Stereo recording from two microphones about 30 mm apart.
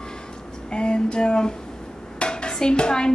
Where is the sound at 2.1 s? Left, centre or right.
Left.